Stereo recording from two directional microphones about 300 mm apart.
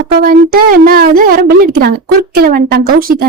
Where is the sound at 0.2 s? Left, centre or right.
Right.